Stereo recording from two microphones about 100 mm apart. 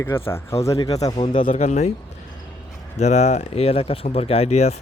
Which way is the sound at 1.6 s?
90° left.